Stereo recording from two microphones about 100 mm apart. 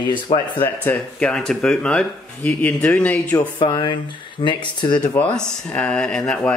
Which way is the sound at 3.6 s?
50° left (ahead or behind).